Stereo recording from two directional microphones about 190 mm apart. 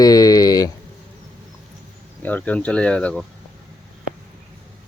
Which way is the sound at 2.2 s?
10° left (ahead or behind).